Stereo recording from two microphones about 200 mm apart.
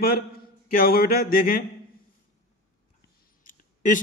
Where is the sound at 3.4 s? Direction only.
40° left (ahead or behind).